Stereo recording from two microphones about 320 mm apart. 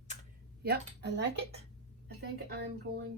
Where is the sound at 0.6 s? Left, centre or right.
Right.